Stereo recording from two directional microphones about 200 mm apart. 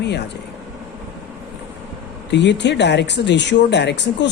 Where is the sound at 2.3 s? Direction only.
60° left (ahead or behind).